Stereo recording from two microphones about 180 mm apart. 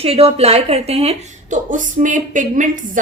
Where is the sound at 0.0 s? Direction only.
35° right (ahead or behind).